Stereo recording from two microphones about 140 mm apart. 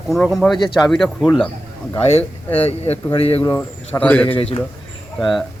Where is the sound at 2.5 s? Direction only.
50° left (ahead or behind).